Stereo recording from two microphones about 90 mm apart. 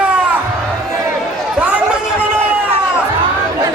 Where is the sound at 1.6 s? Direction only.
15° right (ahead or behind).